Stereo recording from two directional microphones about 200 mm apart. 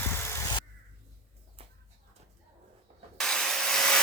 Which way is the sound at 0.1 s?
10° left (ahead or behind).